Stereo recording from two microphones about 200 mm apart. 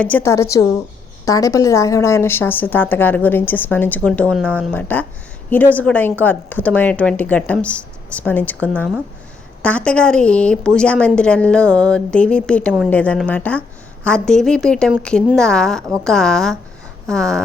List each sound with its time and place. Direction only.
0.0 s a woman's voice: 10° left (ahead or behind)